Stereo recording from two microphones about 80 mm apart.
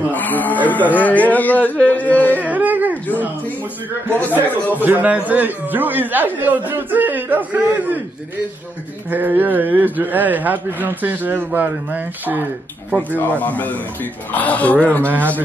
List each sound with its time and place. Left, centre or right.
0.1 s a sound: left
0.9 s carnatic music: centre
2.4 s whimper: right
4.2 s carnatic music: left
4.7 s speech: right
9.1 s speech: right
13.4 s carnatic music: left
15.0 s speech: right